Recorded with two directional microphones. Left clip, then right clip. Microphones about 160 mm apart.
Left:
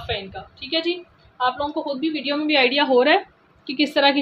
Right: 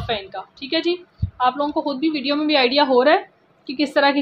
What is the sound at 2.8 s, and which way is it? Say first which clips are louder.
A woman's voice: right 1 dB; 15° right (ahead or behind).